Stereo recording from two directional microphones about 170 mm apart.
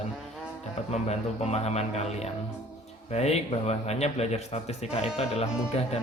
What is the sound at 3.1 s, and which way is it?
Speech, 40° left (ahead or behind).